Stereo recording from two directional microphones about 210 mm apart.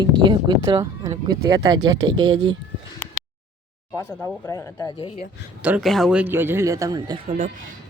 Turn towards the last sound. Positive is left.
turn(degrees=-35)  # may be behind; listen again after turning